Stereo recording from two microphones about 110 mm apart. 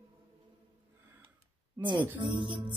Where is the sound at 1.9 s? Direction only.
45° right (ahead or behind).